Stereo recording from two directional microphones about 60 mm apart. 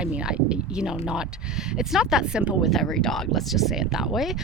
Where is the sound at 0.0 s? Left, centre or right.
Centre.